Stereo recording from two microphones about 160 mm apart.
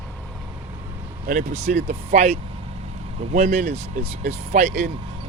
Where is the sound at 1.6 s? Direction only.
40° right (ahead or behind).